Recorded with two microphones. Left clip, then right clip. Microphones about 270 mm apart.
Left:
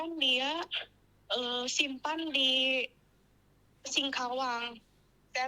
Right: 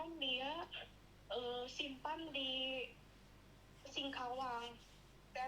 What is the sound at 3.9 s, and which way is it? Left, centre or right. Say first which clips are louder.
Speech: left 12 dB; left.